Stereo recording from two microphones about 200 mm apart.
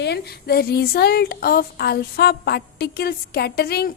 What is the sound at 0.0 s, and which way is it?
A woman's voice, 55° left (ahead or behind).